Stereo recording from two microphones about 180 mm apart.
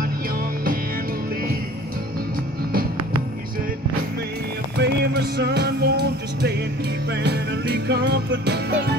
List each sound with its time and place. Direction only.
4.7 s music: 65° right (ahead or behind)